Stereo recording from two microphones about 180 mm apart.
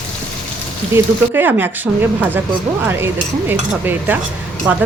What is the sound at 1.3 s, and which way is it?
Speech, 10° right (ahead or behind).